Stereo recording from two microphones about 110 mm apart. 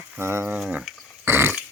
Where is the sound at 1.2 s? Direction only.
20° right (ahead or behind).